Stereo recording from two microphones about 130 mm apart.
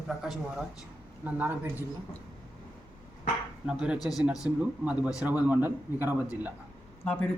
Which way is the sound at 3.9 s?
30° left (ahead or behind).